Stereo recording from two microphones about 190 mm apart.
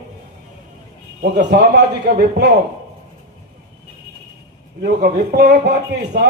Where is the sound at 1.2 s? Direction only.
60° right (ahead or behind).